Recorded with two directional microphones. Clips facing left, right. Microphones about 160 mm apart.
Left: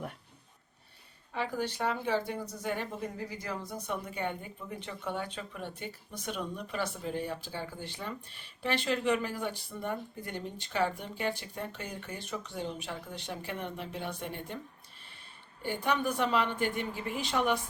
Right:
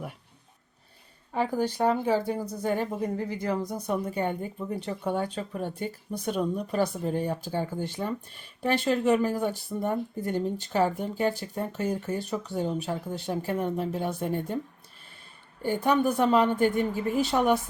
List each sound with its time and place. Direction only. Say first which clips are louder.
1.3 s speech: right 7 dB; 45° right (ahead or behind)
3.6 s speech: right 8 dB; 35° right (ahead or behind)
15.6 s speech: right 7 dB; 45° right (ahead or behind)